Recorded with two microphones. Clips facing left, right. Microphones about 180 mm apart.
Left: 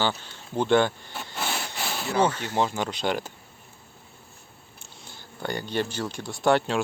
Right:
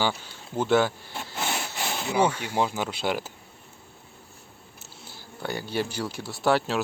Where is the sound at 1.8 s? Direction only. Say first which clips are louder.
Even; 20° right (ahead or behind).